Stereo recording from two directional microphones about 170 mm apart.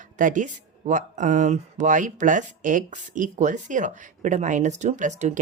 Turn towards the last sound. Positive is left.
turn(degrees=-45)  # may be behind; listen again after turning